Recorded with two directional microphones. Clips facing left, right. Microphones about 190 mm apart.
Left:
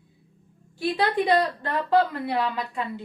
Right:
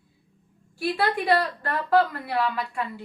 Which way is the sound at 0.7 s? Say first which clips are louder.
Left 2 dB; 20° left (ahead or behind).